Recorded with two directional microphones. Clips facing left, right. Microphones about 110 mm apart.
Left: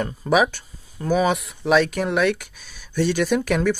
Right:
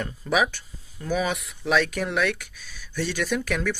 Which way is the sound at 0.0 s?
45° left (ahead or behind).